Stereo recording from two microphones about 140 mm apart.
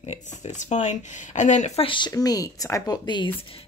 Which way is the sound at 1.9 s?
35° left (ahead or behind).